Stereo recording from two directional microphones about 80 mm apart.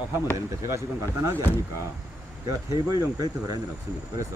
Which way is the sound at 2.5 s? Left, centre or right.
Right.